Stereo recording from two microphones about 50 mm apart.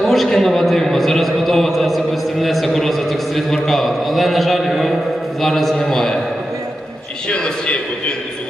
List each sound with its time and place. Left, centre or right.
0.0 s a man's voice: centre
7.3 s a man's voice: centre